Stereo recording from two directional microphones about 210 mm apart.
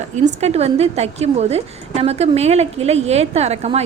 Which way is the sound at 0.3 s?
30° right (ahead or behind).